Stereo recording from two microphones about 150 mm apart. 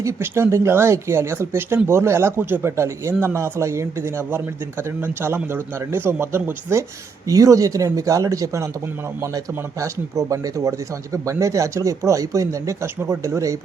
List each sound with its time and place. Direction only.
0.0 s a man's voice: 20° right (ahead or behind)